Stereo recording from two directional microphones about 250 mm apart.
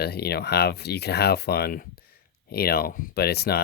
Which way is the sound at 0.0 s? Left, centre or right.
Left.